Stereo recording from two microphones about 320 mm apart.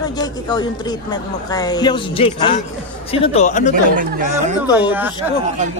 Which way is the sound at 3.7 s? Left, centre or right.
Right.